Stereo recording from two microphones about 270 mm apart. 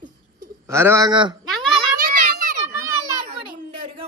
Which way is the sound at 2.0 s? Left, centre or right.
Right.